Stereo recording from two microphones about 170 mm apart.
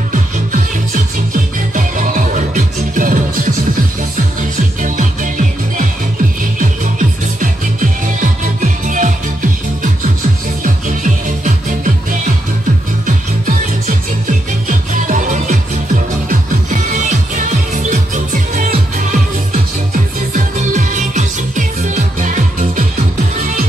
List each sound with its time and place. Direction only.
0.1 s music: 50° right (ahead or behind)
6.6 s music: 50° right (ahead or behind)
10.6 s music: 45° right (ahead or behind)